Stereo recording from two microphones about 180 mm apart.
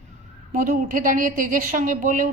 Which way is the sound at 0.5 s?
50° right (ahead or behind).